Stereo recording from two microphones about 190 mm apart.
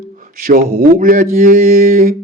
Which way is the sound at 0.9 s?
45° right (ahead or behind).